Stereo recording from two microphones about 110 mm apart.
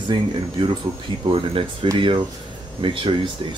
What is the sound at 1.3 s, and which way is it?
Speech, 55° right (ahead or behind).